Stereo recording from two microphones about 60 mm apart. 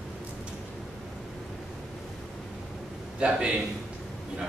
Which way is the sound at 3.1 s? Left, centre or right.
Centre.